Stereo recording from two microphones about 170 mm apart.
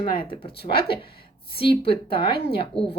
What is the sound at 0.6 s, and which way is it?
Speech, 35° left (ahead or behind).